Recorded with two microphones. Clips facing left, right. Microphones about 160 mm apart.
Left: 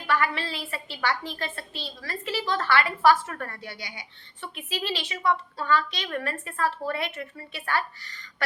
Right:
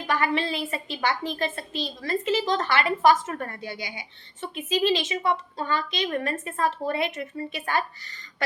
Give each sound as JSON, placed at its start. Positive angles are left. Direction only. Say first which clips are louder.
{"t": 0.1, "sound": "a woman's voice", "louder": "right 2 dB", "side_deg": -20}